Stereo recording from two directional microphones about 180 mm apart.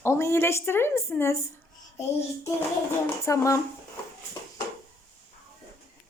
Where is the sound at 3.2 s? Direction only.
15° left (ahead or behind).